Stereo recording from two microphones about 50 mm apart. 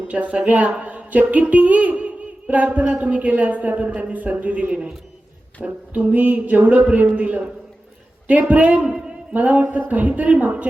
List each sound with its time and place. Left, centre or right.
0.1 s a man's voice: right
0.8 s a sound: right
3.0 s a woman's voice: right
8.8 s speech: centre
9.3 s a woman's voice: right